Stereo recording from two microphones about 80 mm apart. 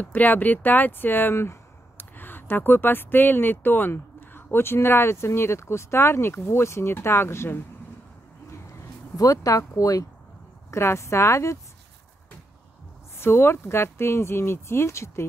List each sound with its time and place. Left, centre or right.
0.0 s speech: left
9.1 s speech: left
10.7 s speech: left
13.2 s speech: left